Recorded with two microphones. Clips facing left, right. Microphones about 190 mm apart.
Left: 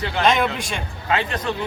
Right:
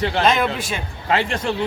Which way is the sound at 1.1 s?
30° right (ahead or behind).